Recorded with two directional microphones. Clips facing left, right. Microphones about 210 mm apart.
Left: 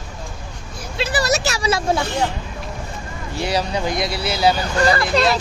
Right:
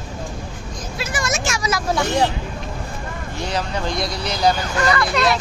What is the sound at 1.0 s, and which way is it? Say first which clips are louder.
Speech: left 5 dB; 35° left (ahead or behind).